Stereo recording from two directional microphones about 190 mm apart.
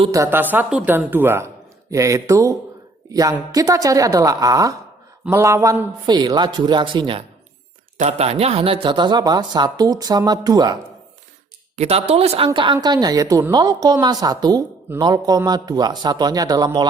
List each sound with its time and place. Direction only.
0.1 s a woman's voice: 15° right (ahead or behind)
11.8 s a woman's voice: 35° right (ahead or behind)